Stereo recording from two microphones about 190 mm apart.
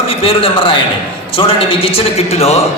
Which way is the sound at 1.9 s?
30° left (ahead or behind).